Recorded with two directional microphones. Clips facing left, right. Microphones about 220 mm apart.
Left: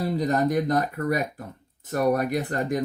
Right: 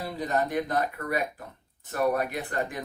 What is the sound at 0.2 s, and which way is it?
Speech, 40° left (ahead or behind).